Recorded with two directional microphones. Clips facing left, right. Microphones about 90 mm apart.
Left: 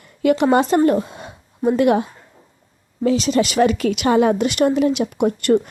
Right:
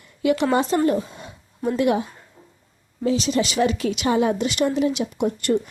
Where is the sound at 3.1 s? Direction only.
60° left (ahead or behind).